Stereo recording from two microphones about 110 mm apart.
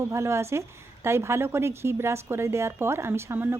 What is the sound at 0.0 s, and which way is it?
A woman's voice, 25° right (ahead or behind).